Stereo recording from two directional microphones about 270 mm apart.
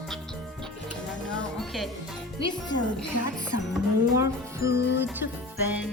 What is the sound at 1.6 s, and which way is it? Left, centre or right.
Music, centre.